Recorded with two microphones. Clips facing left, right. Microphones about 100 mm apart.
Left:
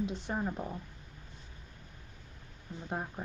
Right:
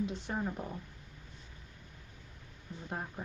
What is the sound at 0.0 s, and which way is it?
Speech, 15° left (ahead or behind).